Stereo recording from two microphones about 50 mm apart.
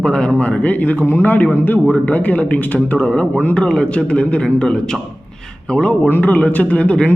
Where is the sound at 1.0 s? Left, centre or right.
Left.